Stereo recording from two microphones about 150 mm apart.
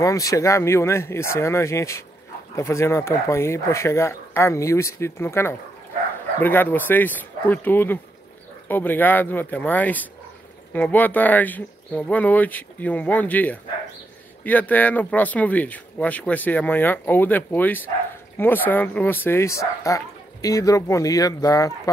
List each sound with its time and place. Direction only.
0.0 s speech: 20° left (ahead or behind)